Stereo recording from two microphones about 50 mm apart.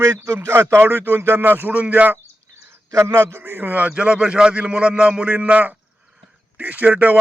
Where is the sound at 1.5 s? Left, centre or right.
Right.